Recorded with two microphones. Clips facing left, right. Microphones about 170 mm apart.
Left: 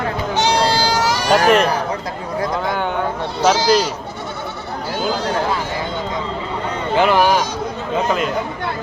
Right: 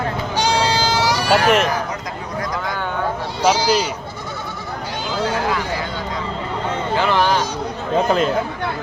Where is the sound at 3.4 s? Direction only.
10° right (ahead or behind).